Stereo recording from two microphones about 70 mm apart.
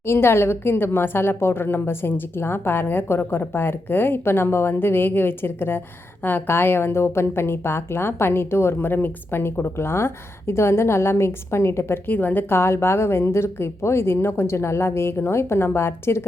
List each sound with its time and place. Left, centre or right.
0.0 s a woman's voice: left